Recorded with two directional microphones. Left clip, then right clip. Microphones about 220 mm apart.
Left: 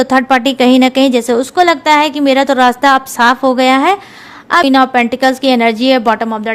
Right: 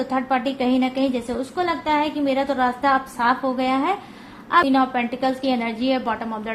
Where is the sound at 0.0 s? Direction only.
50° left (ahead or behind).